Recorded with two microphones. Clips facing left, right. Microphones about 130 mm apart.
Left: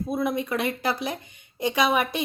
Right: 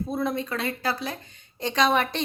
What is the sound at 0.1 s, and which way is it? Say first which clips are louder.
Speech: left 4 dB; 10° left (ahead or behind).